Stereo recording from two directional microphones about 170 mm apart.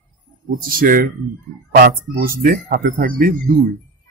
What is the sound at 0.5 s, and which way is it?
A man's voice, 55° right (ahead or behind).